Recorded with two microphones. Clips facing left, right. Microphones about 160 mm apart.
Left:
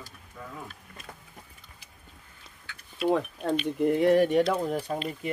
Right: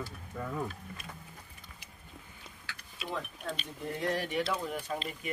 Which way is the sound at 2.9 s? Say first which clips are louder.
Left 13 dB; 70° left (ahead or behind).